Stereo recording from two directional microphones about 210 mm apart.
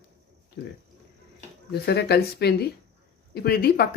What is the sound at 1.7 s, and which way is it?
Speech, 50° left (ahead or behind).